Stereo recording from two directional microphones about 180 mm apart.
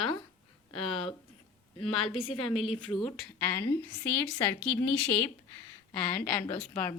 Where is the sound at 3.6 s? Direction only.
15° left (ahead or behind).